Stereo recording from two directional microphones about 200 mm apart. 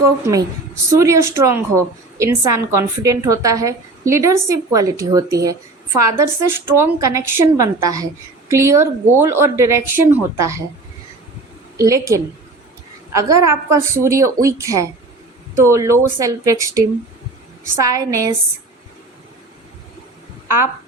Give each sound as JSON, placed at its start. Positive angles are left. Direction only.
{"t": 0.0, "sound": "a woman's voice", "side_deg": -15}
{"t": 11.8, "sound": "a woman's voice", "side_deg": -15}